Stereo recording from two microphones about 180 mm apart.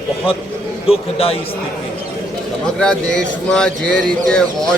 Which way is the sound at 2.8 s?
5° left (ahead or behind).